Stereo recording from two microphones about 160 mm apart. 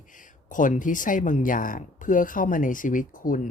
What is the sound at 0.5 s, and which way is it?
Speech, 55° left (ahead or behind).